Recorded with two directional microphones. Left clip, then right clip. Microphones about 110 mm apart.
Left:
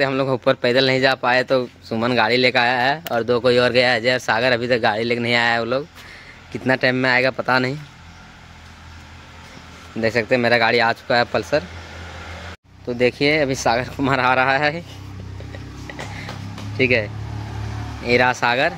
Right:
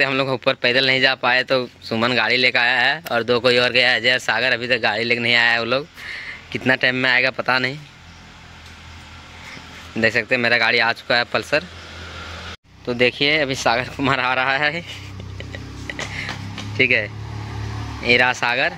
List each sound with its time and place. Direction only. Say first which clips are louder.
0.0 s speech: even; 10° left (ahead or behind)
3.3 s speech: left 1 dB; 15° left (ahead or behind)
6.5 s speech: right 1 dB; 10° left (ahead or behind)
9.9 s speech: even; centre (ahead or behind)
12.8 s speech: even; 10° left (ahead or behind)
15.9 s music: right 5 dB; 15° left (ahead or behind)
16.7 s speech: right 1 dB; 5° left (ahead or behind)